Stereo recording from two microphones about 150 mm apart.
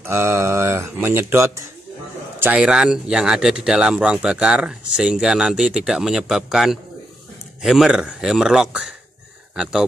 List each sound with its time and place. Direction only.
0.0 s mantra: 15° right (ahead or behind)
1.0 s speech: 15° right (ahead or behind)
2.4 s speech: 5° right (ahead or behind)